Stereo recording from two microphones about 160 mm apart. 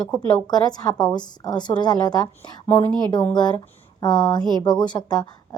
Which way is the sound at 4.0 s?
30° left (ahead or behind).